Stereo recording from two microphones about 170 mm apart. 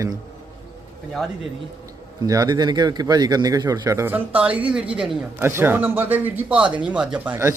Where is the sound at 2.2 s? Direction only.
20° right (ahead or behind); by 7.3 s 5° right (ahead or behind).